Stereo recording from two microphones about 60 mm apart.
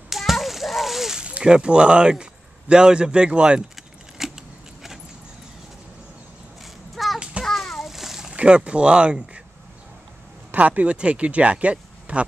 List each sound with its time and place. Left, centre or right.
0.1 s splash: centre
1.4 s speech: centre
4.2 s keys jangling: centre
6.6 s a sound: centre
7.4 s splash: centre
8.3 s speech: centre
10.5 s speech: right